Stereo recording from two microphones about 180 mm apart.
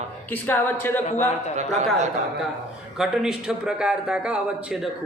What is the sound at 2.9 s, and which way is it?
A man's voice, centre (ahead or behind).